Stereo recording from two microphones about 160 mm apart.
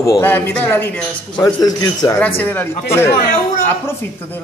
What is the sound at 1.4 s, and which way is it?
Speech, 25° left (ahead or behind).